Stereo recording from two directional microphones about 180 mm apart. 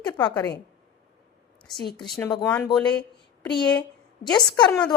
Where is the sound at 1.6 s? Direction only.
Centre (ahead or behind).